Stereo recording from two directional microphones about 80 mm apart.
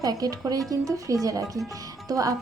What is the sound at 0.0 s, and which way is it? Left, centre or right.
Speech, right.